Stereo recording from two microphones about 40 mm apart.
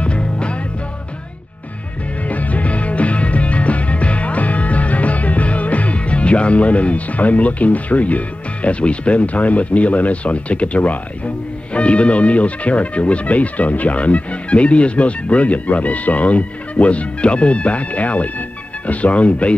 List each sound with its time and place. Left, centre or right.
0.0 s music: left
2.2 s music: left
18.9 s speech: left